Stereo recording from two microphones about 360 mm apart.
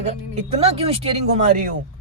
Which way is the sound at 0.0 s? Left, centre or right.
Centre.